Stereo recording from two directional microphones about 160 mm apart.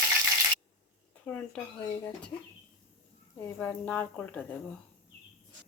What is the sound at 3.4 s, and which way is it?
Speech, 10° left (ahead or behind).